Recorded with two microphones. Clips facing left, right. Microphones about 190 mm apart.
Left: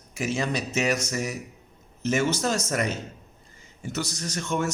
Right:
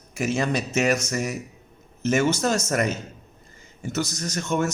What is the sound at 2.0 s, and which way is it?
A man's voice, 50° right (ahead or behind).